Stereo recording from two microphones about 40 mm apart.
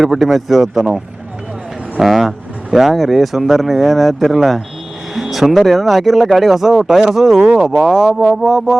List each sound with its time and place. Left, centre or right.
0.0 s speech: centre
7.4 s speech: centre
8.2 s speech: centre